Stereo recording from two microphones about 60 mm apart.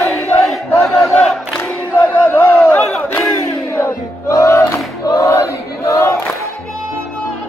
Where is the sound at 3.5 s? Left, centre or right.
Left.